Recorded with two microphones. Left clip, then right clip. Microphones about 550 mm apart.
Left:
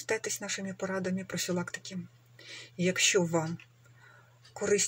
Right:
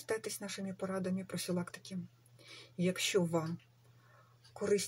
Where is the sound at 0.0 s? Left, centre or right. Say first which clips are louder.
Left 6 dB; right.